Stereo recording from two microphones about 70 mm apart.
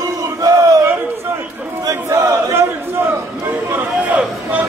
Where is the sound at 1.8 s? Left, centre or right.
Right.